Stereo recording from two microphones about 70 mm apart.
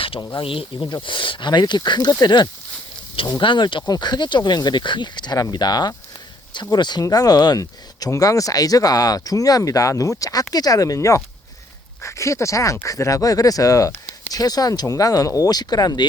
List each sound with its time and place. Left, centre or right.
1.5 s speech: left
2.2 s speech: left
3.3 s speech: left
7.0 s speech: left